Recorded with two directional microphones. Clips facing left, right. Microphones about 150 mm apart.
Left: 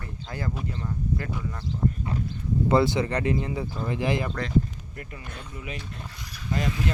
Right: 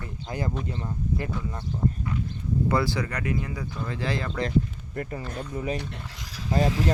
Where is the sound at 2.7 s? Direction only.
25° left (ahead or behind).